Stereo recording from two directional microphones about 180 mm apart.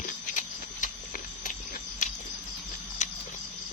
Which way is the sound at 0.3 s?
45° left (ahead or behind).